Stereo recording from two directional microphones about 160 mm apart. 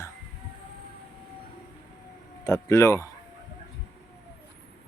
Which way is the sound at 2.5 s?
15° left (ahead or behind).